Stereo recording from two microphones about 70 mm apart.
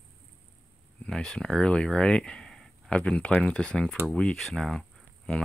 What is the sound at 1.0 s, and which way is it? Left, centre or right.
Speech, centre.